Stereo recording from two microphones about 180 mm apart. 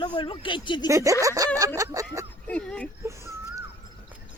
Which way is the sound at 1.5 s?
15° right (ahead or behind).